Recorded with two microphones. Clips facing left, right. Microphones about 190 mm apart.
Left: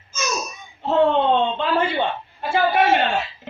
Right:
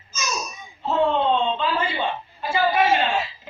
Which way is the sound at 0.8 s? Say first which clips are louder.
Left 3 dB; 60° left (ahead or behind).